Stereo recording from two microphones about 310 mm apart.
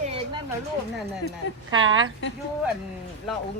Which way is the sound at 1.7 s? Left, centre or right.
Right.